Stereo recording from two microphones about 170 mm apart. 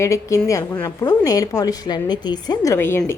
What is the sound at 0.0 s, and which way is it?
A woman's voice, 15° left (ahead or behind).